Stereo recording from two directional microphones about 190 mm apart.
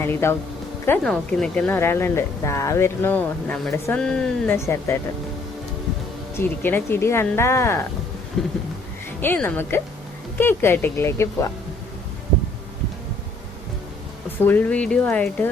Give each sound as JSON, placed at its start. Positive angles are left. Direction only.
{"t": 0.0, "sound": "speech", "side_deg": 15}
{"t": 6.3, "sound": "speech", "side_deg": 10}
{"t": 8.4, "sound": "speech", "side_deg": 5}
{"t": 14.3, "sound": "speech", "side_deg": 10}